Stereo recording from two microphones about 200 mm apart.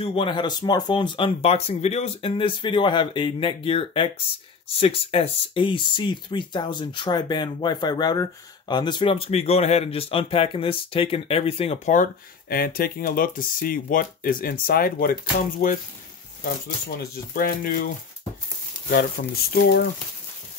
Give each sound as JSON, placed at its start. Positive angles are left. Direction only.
{"t": 0.0, "sound": "speech", "side_deg": 30}
{"t": 16.4, "sound": "speech", "side_deg": 50}
{"t": 19.2, "sound": "speech", "side_deg": 45}